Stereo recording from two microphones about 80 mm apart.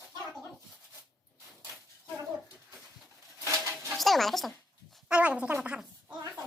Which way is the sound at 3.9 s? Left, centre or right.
Centre.